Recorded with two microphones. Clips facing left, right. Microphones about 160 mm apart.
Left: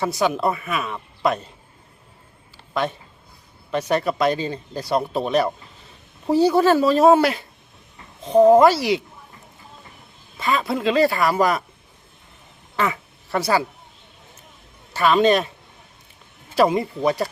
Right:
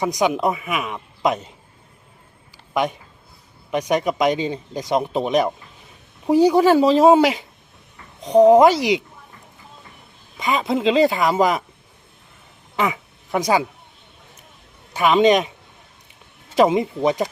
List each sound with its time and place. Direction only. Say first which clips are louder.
0.0 s speech: right 1 dB; 15° right (ahead or behind)
2.7 s speech: right 2 dB; 15° right (ahead or behind)
10.3 s speech: right 2 dB; 15° right (ahead or behind)
12.7 s quack: right 1 dB; 15° right (ahead or behind)
14.9 s speech: right 2 dB; 15° right (ahead or behind)
16.6 s speech: right 2 dB; 20° right (ahead or behind)